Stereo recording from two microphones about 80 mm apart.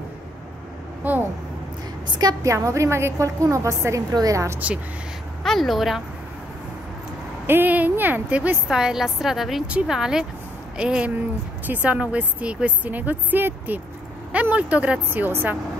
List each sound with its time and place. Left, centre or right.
1.0 s a sound: right
2.4 s a woman's voice: right
5.4 s a woman's voice: centre
7.4 s a woman's voice: right
8.6 s a woman's voice: centre; by 15.5 s right